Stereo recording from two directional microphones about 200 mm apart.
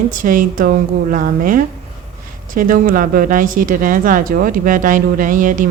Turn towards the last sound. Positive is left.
turn(degrees=-40)  # may be behind; listen again after turning